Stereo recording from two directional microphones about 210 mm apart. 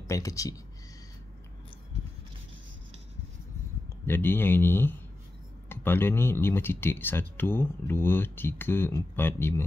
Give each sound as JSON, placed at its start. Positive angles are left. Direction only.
{"t": 0.0, "sound": "speech", "side_deg": 15}
{"t": 4.0, "sound": "speech", "side_deg": 10}